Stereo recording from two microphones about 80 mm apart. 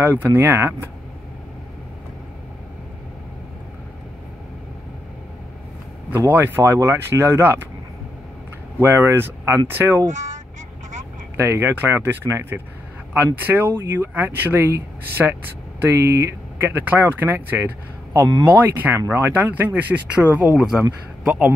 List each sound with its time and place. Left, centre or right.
0.0 s speech: right
6.1 s speech: right
8.7 s speech: right
11.3 s speech: right
15.2 s speech: centre
15.8 s speech: right
20.5 s speech: centre